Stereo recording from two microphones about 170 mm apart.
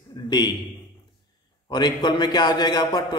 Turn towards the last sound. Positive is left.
turn(degrees=25)  # may be behind; listen again after turning